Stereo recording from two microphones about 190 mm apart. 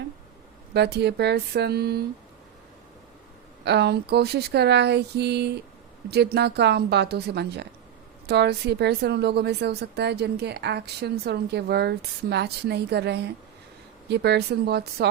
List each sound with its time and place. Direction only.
0.7 s a woman's voice: 60° right (ahead or behind)
3.6 s a woman's voice: 60° right (ahead or behind)